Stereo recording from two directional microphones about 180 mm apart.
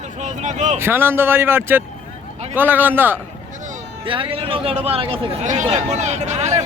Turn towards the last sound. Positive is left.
turn(degrees=-40)  # may be behind; listen again after turning